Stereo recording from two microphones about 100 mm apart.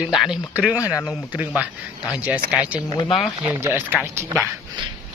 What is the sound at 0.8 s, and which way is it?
Speech, 35° left (ahead or behind).